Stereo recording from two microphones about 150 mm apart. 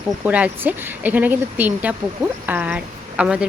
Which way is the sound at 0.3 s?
10° right (ahead or behind).